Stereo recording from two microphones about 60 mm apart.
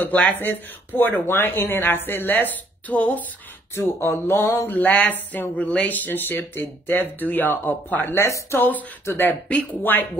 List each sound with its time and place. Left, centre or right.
0.3 s speech: left
3.7 s a sound: left
4.6 s speech: left